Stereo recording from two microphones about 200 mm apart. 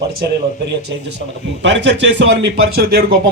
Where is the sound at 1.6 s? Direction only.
65° right (ahead or behind).